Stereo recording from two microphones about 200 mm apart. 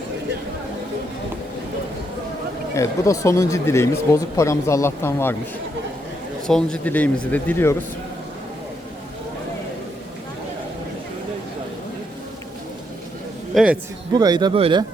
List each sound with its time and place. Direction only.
2.7 s speech: 15° left (ahead or behind)
6.5 s speech: 5° left (ahead or behind)
13.5 s a man's voice: centre (ahead or behind)
14.1 s speech: 20° right (ahead or behind)